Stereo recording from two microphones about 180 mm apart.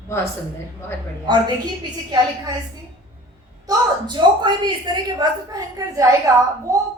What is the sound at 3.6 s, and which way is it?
A woman's voice, 25° right (ahead or behind).